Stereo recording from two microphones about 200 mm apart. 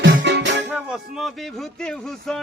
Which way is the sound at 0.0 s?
60° right (ahead or behind).